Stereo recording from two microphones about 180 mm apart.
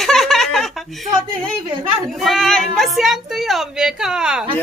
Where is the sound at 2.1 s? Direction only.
Centre (ahead or behind).